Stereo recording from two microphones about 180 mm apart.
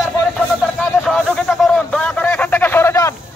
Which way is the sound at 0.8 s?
5° left (ahead or behind).